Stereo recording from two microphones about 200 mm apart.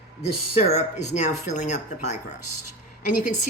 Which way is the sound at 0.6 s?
35° left (ahead or behind).